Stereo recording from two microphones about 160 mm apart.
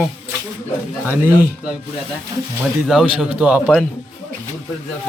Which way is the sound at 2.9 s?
5° right (ahead or behind).